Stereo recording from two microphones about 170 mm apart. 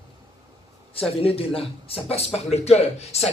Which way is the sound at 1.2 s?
35° left (ahead or behind).